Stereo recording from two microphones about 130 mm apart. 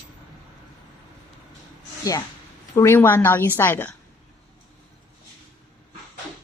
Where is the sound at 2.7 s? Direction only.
20° left (ahead or behind).